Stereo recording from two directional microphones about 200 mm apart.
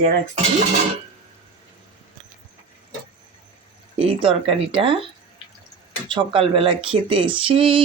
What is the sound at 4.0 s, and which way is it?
Speech, 25° right (ahead or behind).